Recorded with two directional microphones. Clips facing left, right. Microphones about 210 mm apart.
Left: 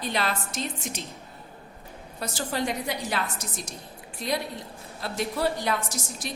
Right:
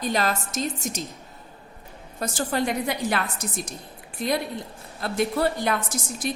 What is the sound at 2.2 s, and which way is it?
A woman's voice, 50° right (ahead or behind).